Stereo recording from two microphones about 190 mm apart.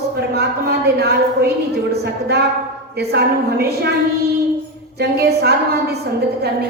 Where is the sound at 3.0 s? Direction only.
55° right (ahead or behind).